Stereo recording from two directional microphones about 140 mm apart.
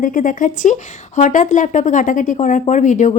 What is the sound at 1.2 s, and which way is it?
Speech, 60° left (ahead or behind).